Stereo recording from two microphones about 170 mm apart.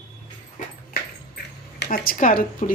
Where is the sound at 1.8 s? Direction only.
65° left (ahead or behind).